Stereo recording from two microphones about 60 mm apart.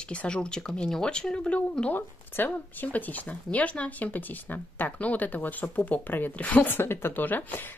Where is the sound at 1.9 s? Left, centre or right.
Left.